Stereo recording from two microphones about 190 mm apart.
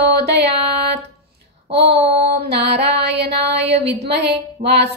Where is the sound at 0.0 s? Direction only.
60° right (ahead or behind).